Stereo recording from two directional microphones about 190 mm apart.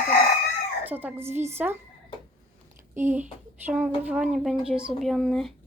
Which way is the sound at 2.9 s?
10° right (ahead or behind).